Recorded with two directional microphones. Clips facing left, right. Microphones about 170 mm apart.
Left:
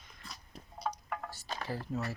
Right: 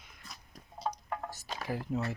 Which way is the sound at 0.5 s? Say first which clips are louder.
Left 3 dB; 25° left (ahead or behind).